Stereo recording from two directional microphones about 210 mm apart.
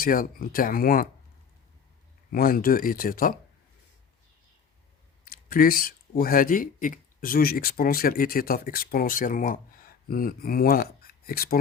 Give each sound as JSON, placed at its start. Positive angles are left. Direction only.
{"t": 0.0, "sound": "speech", "side_deg": 45}
{"t": 2.3, "sound": "speech", "side_deg": 45}
{"t": 5.2, "sound": "speech", "side_deg": 45}